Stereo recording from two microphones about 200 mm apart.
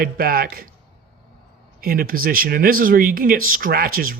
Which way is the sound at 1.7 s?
50° right (ahead or behind).